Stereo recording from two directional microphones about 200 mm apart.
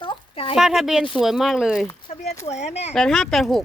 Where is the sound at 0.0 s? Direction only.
25° left (ahead or behind).